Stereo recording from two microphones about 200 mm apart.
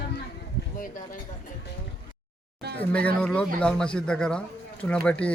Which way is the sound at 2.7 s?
5° left (ahead or behind).